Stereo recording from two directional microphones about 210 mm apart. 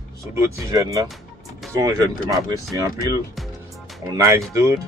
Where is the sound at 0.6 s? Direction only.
15° right (ahead or behind).